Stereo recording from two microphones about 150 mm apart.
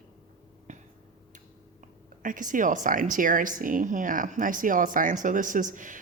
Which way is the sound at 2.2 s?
60° right (ahead or behind).